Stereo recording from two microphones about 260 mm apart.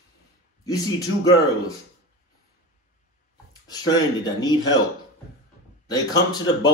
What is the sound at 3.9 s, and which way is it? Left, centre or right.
Speech, centre.